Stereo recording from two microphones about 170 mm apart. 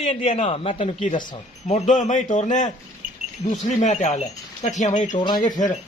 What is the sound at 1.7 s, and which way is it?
Speech, 45° left (ahead or behind).